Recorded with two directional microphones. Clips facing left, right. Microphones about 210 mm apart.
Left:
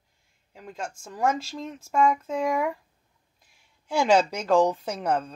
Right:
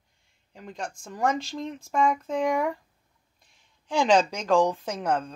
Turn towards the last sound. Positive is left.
turn(degrees=10)  # may be behind; listen again after turning